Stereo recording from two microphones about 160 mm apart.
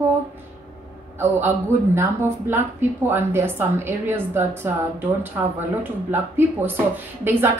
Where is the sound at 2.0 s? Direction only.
15° right (ahead or behind).